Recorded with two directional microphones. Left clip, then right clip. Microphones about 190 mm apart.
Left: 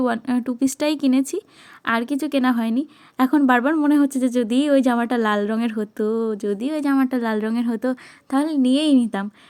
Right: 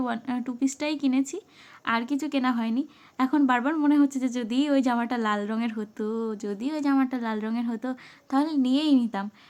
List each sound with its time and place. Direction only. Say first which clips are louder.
0.0 s a woman's voice: left 8 dB; 25° left (ahead or behind)